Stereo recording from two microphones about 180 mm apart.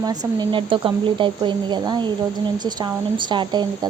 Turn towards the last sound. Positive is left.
turn(degrees=-25)  # may be behind; listen again after turning